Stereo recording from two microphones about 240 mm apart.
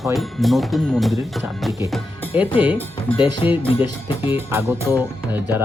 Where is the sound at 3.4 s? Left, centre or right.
Left.